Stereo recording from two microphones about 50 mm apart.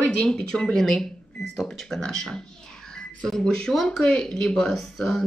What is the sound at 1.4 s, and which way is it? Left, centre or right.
Cash register, centre.